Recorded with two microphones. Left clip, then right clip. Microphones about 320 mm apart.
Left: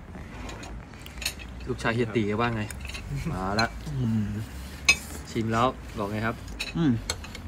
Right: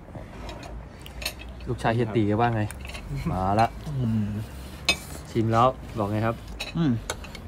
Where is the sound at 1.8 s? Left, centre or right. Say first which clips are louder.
Right 2 dB; right.